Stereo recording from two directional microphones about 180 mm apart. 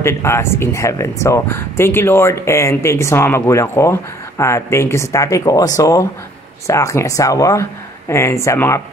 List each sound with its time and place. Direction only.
0.0 s speech: 15° left (ahead or behind)